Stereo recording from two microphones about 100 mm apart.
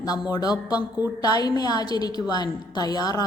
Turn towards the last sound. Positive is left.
turn(degrees=40)  # may be behind; listen again after turning